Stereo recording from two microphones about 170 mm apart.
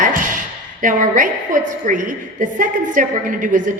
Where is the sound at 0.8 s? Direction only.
50° right (ahead or behind).